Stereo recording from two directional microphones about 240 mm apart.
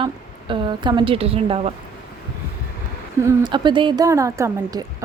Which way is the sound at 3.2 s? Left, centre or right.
Centre.